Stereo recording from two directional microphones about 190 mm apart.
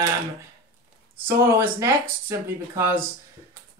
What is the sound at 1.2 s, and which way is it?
Speech, 15° right (ahead or behind).